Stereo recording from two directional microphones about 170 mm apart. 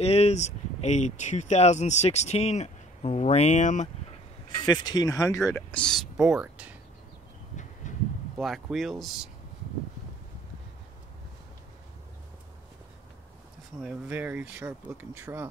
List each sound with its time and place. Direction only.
0.0 s speech: 40° left (ahead or behind)
4.6 s speech: 25° left (ahead or behind)
5.7 s speech: 5° left (ahead or behind)
7.8 s a sound: 45° left (ahead or behind)
8.4 s speech: centre (ahead or behind)
13.7 s speech: 5° right (ahead or behind)